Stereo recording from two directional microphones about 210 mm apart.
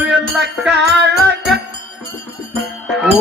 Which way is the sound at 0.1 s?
55° right (ahead or behind).